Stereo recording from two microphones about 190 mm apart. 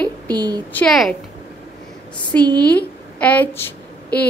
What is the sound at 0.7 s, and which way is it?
Speech, 5° left (ahead or behind).